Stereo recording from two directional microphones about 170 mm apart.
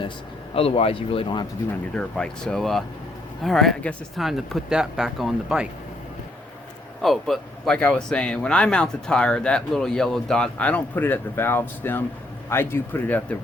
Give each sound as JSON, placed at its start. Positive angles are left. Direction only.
{"t": 0.5, "sound": "speech", "side_deg": 35}
{"t": 2.0, "sound": "speech", "side_deg": 5}
{"t": 7.0, "sound": "speech", "side_deg": 0}